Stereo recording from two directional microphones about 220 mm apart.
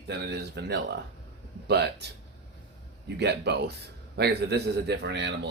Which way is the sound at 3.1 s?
50° right (ahead or behind).